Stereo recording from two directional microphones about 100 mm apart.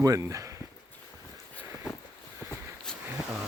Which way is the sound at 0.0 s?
35° right (ahead or behind).